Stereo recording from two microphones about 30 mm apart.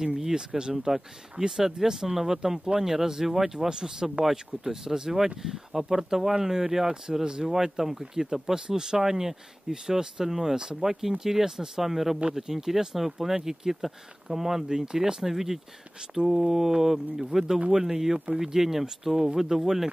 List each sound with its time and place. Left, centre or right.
0.0 s speech: right
1.6 s speech: centre
3.5 s speech: right
4.2 s speech: centre
8.5 s speech: right
10.5 s speech: right
10.8 s speech: centre